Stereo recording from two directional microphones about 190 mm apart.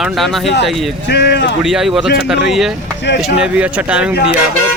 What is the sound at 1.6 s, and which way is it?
Speech, centre (ahead or behind).